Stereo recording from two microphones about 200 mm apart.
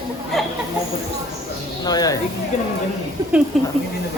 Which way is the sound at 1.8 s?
20° left (ahead or behind).